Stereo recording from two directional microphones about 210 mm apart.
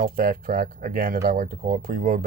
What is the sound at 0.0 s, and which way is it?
Speech, 40° right (ahead or behind).